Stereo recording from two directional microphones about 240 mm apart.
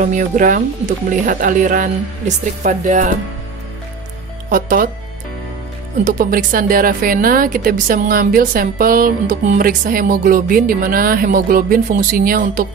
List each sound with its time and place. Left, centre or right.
0.0 s a woman's voice: right
4.5 s a woman's voice: right
6.0 s a woman's voice: right